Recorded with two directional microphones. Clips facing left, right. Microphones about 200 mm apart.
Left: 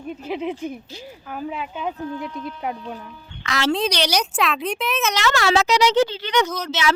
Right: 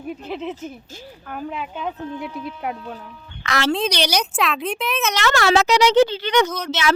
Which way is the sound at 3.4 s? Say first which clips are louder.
Right 2 dB; 60° right (ahead or behind).